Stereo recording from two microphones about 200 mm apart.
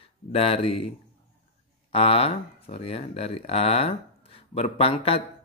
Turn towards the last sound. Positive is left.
turn(degrees=30)  # may be behind; listen again after turning